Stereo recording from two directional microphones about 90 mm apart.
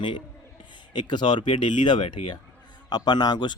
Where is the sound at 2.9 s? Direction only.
50° left (ahead or behind).